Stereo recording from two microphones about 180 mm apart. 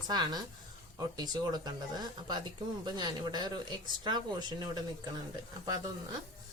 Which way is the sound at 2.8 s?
25° right (ahead or behind).